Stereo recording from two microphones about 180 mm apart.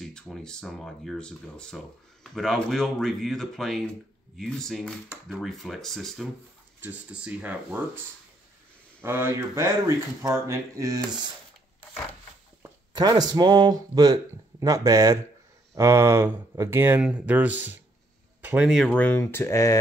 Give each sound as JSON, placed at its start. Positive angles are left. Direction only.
{"t": 0.0, "sound": "speech", "side_deg": 0}
{"t": 9.0, "sound": "speech", "side_deg": -15}
{"t": 12.6, "sound": "speech", "side_deg": -20}
{"t": 18.4, "sound": "a sound", "side_deg": -10}
{"t": 18.7, "sound": "speech", "side_deg": 5}